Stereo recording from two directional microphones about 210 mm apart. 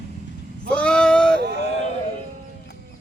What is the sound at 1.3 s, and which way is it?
Speech, 55° right (ahead or behind).